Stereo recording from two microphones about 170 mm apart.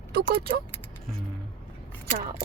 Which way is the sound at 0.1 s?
60° right (ahead or behind).